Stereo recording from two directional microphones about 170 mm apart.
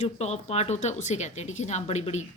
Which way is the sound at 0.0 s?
40° left (ahead or behind).